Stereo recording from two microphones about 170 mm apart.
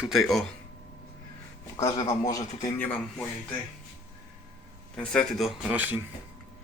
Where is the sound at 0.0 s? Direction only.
Centre (ahead or behind).